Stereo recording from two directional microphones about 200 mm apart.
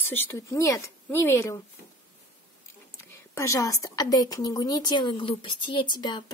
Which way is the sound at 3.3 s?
15° left (ahead or behind).